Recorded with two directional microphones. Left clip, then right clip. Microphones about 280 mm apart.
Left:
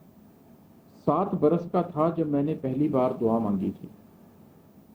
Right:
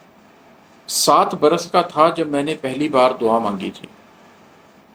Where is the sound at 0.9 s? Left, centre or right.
Centre.